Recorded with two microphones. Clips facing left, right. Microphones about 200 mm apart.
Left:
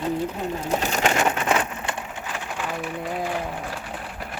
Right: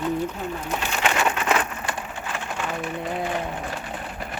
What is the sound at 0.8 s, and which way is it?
Bird, 45° left (ahead or behind).